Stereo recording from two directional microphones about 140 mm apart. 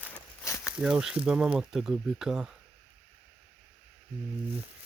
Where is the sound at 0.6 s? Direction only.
5° right (ahead or behind).